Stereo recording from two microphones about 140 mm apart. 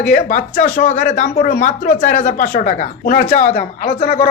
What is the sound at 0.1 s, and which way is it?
Speech, 70° left (ahead or behind).